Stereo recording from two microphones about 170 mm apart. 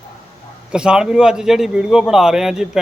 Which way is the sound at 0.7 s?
5° right (ahead or behind).